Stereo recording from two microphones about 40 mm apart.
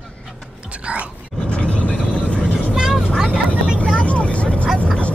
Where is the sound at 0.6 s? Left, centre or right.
Right.